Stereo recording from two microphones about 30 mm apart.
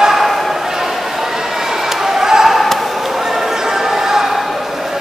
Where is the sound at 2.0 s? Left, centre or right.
Centre.